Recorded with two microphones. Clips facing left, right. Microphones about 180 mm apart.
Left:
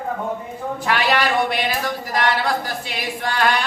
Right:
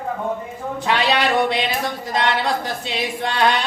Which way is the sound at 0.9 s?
20° right (ahead or behind).